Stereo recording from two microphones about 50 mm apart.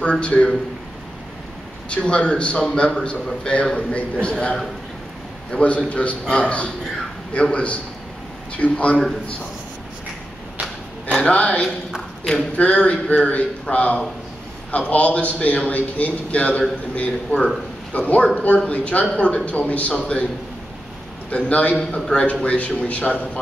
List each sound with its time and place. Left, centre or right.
0.0 s a man's voice: left
1.9 s a man's voice: left
11.1 s a man's voice: left
21.3 s a man's voice: left
21.7 s a man's voice: centre